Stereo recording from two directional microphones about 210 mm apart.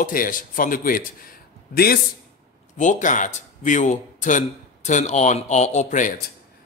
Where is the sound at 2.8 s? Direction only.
35° left (ahead or behind).